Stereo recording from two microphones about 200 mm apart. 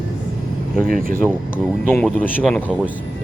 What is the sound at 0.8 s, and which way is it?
Speech, 45° right (ahead or behind).